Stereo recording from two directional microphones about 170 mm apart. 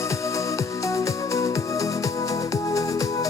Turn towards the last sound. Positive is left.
turn(degrees=20)  # may be behind; listen again after turning